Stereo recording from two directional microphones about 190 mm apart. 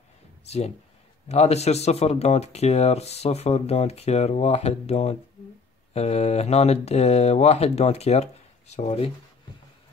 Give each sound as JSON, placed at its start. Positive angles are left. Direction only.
{"t": 0.5, "sound": "speech", "side_deg": 35}